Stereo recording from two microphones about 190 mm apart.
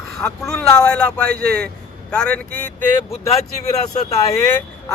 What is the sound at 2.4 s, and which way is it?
Speech, 50° right (ahead or behind).